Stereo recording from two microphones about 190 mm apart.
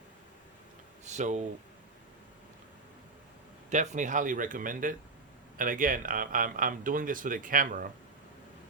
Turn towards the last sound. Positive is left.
turn(degrees=-45)  # may be behind; listen again after turning